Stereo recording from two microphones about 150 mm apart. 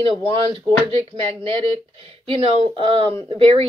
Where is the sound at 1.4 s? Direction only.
35° right (ahead or behind).